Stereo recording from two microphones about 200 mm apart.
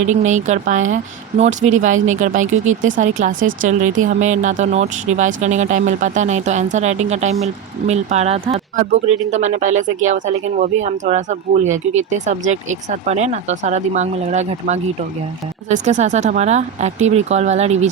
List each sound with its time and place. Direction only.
0.0 s speech: 35° right (ahead or behind)